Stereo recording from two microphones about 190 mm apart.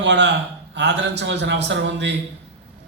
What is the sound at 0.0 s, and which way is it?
A man's voice, 65° right (ahead or behind).